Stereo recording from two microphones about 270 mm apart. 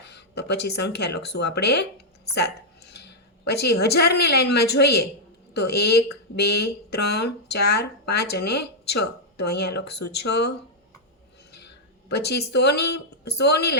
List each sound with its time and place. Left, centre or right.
0.0 s a woman's voice: left
11.5 s speech: left